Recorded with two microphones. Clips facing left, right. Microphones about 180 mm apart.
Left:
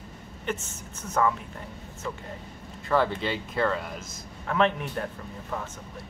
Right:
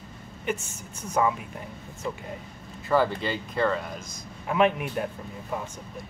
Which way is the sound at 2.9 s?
Centre (ahead or behind).